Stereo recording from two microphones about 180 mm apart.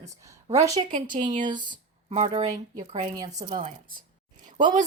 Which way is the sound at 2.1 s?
40° right (ahead or behind).